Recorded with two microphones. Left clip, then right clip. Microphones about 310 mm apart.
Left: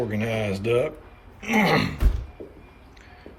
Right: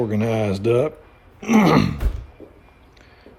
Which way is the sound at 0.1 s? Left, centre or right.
Centre.